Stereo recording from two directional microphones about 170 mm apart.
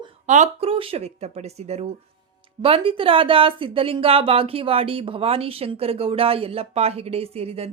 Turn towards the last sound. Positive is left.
turn(degrees=-35)  # may be behind; listen again after turning